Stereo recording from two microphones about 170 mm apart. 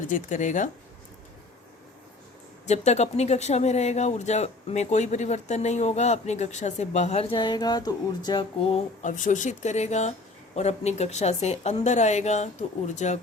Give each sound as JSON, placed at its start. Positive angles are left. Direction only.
{"t": 0.1, "sound": "speech", "side_deg": 50}
{"t": 2.6, "sound": "speech", "side_deg": 40}
{"t": 9.0, "sound": "speech", "side_deg": 45}